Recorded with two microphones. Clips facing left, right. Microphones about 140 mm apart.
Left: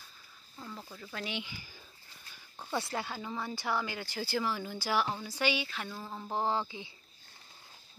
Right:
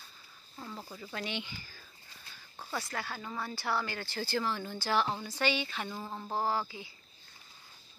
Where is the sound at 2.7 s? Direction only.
25° left (ahead or behind); by 5.9 s 5° left (ahead or behind).